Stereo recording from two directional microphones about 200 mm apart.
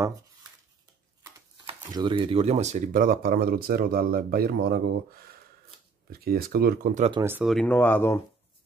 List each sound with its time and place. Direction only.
1.9 s speech: 20° right (ahead or behind); by 7.1 s 45° right (ahead or behind)
7.1 s speech: 15° right (ahead or behind)
7.4 s speech: 5° left (ahead or behind)